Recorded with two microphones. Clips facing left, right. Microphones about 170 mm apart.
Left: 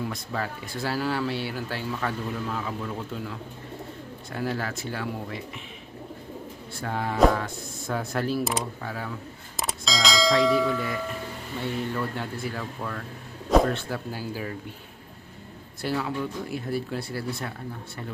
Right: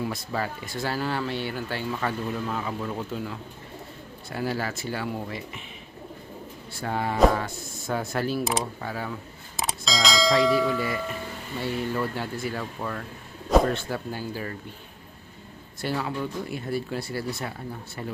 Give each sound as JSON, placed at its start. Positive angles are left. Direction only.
{"t": 0.0, "sound": "speech", "side_deg": -5}
{"t": 6.8, "sound": "speech", "side_deg": 0}
{"t": 9.6, "sound": "a sound", "side_deg": 0}
{"t": 11.6, "sound": "speech", "side_deg": -5}
{"t": 15.8, "sound": "speech", "side_deg": 0}